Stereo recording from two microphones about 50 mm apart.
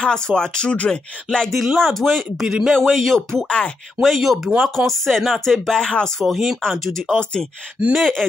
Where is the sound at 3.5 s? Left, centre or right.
Left.